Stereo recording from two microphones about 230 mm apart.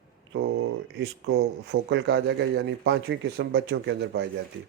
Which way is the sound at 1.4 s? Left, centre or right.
Right.